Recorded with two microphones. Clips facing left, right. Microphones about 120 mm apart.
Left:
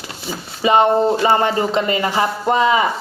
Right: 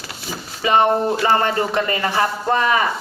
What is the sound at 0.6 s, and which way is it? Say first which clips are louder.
Speech: left 3 dB; 20° left (ahead or behind).